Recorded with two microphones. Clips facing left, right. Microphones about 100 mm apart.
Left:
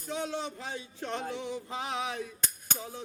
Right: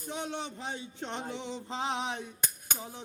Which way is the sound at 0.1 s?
20° right (ahead or behind).